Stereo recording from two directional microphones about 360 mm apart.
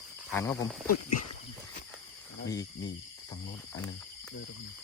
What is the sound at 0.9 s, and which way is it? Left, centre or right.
Speech, left.